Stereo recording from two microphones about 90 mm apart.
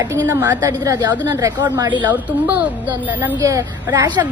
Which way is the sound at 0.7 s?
40° right (ahead or behind).